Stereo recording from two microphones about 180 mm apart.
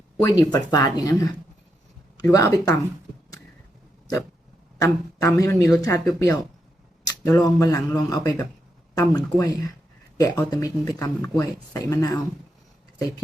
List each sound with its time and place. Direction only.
0.2 s speech: 20° left (ahead or behind)
2.3 s speech: 15° left (ahead or behind)
4.8 s speech: 15° left (ahead or behind)